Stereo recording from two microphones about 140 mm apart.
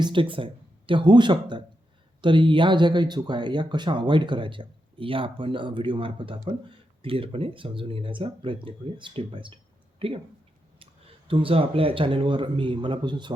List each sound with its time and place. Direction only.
0.0 s speech: 35° right (ahead or behind)
11.3 s speech: 40° right (ahead or behind)